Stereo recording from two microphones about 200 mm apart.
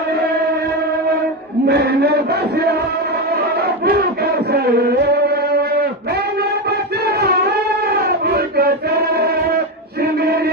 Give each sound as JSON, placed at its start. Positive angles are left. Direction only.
{"t": 1.6, "sound": "a sound", "side_deg": -55}
{"t": 3.5, "sound": "chant", "side_deg": -50}
{"t": 6.7, "sound": "music", "side_deg": -55}
{"t": 7.9, "sound": "chant", "side_deg": -50}